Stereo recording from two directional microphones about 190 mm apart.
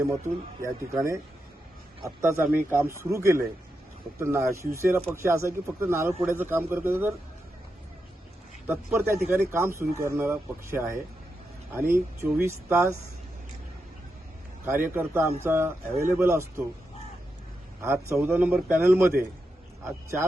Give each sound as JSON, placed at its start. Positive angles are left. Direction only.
{"t": 0.9, "sound": "speech", "side_deg": -15}
{"t": 8.6, "sound": "speech", "side_deg": -10}
{"t": 14.6, "sound": "speech", "side_deg": -10}
{"t": 17.8, "sound": "a man's voice", "side_deg": -15}